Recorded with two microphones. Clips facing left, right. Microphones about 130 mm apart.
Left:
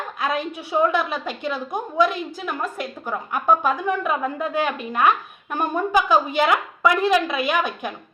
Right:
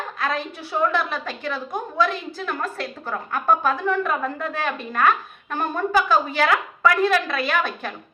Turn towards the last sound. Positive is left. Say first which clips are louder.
# left 1 dB
turn(degrees=15)  # may be behind; listen again after turning